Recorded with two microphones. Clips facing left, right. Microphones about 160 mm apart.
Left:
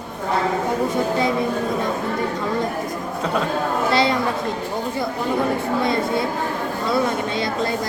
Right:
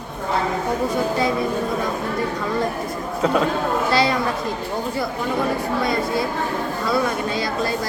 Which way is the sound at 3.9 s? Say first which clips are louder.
Left 1 dB; 25° left (ahead or behind).